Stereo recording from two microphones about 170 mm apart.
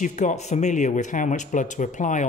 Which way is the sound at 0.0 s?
45° left (ahead or behind).